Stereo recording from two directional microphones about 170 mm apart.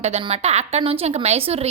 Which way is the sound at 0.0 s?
40° right (ahead or behind).